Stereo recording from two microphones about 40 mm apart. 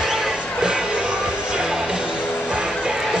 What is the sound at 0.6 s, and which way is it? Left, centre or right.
Music, right.